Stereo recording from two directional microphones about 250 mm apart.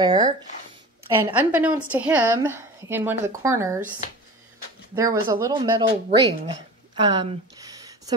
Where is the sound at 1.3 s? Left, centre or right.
Centre.